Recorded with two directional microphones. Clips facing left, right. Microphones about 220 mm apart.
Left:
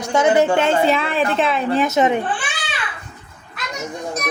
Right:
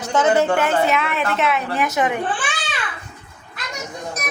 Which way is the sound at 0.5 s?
25° left (ahead or behind).